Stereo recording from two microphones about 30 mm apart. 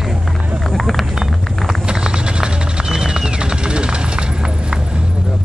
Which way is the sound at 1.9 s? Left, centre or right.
Right.